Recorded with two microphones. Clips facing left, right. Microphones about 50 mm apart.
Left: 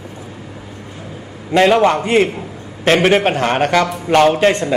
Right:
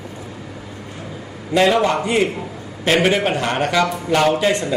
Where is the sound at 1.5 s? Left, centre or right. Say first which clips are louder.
Left 4 dB; left.